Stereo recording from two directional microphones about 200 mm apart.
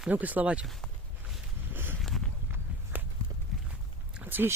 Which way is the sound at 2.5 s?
10° right (ahead or behind).